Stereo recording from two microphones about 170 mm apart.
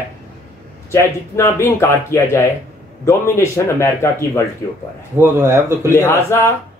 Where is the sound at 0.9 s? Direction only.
15° left (ahead or behind).